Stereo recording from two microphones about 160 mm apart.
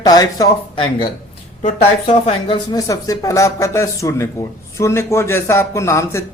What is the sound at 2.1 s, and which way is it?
Speech, 40° left (ahead or behind).